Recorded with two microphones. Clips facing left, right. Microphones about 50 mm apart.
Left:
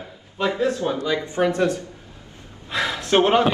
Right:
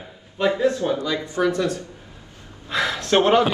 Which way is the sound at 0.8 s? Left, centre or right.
Left.